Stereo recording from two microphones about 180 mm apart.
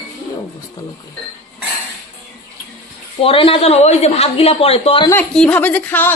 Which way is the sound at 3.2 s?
30° left (ahead or behind).